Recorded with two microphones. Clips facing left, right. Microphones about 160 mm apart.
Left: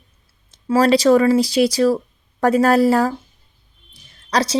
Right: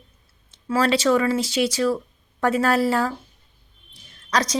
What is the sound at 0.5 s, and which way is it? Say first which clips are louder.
A woman's voice: left 6 dB; 40° left (ahead or behind).